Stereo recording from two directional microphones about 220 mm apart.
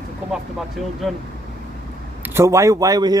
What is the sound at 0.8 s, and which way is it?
Speech, centre (ahead or behind).